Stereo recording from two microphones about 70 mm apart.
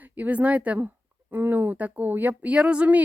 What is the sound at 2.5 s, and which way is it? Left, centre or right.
Speech, centre.